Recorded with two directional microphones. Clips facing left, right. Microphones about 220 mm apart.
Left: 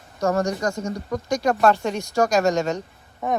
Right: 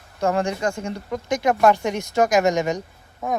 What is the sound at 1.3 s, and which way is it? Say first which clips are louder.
Speech: right 1 dB; 20° right (ahead or behind).